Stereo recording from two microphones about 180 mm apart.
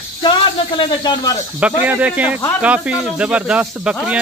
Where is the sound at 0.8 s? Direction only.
25° left (ahead or behind).